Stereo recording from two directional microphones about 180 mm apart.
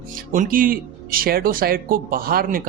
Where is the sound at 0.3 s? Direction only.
50° right (ahead or behind).